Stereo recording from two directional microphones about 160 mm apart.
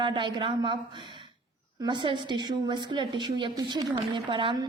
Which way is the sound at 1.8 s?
30° right (ahead or behind).